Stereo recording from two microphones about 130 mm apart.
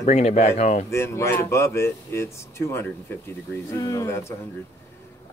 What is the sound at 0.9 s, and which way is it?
Speech, 20° left (ahead or behind).